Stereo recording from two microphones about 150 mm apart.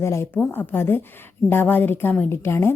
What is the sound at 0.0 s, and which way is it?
A woman's voice, 15° left (ahead or behind).